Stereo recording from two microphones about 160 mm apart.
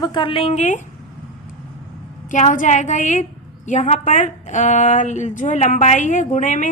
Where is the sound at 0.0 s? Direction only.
30° left (ahead or behind).